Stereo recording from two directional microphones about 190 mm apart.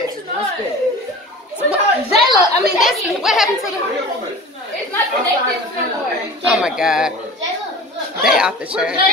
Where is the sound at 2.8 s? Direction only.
Centre (ahead or behind).